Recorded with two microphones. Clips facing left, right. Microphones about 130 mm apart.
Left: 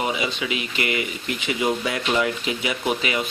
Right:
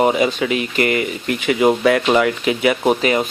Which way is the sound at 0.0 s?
50° right (ahead or behind).